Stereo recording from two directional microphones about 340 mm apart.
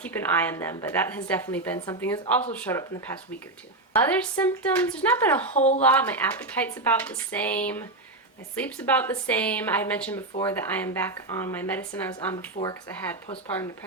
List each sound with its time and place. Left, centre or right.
0.0 s a woman's voice: centre
5.5 s speech: centre
5.9 s a woman's voice: centre